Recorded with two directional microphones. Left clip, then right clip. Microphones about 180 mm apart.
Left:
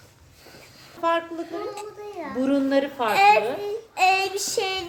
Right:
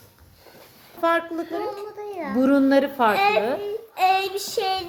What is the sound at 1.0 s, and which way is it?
A woman's voice, 55° right (ahead or behind).